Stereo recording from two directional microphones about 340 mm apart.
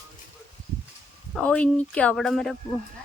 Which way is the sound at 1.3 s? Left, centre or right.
Centre.